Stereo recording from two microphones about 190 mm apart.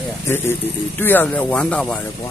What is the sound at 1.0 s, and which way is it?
Speech, 10° left (ahead or behind).